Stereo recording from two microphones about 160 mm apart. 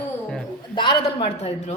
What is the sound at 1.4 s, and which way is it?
Speech, 40° left (ahead or behind).